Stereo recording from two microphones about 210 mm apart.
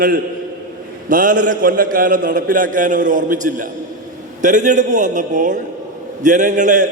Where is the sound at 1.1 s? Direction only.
40° right (ahead or behind).